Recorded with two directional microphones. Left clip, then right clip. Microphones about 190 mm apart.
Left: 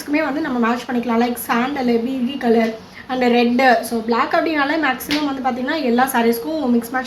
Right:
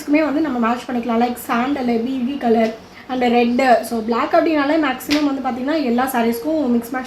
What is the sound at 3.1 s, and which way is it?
A woman's voice, 50° right (ahead or behind).